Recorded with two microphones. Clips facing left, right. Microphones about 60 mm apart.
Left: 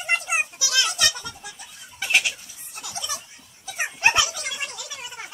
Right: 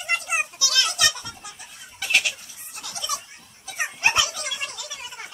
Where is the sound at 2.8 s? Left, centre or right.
Centre.